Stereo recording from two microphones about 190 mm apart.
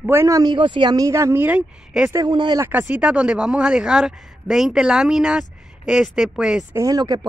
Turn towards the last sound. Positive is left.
turn(degrees=-20)  # may be behind; listen again after turning